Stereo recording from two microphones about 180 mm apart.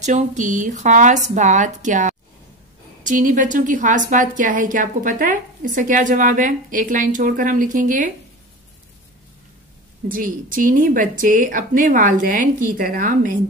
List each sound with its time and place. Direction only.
0.0 s a woman's voice: 40° right (ahead or behind)
10.0 s a woman's voice: 50° right (ahead or behind)